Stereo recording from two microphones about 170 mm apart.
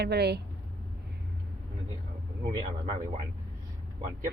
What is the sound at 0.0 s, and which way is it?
Speech, 75° right (ahead or behind).